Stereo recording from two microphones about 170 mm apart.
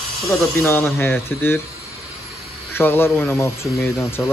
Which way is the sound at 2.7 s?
10° left (ahead or behind).